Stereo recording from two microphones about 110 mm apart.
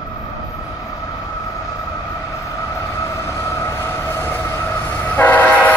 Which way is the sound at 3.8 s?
20° left (ahead or behind).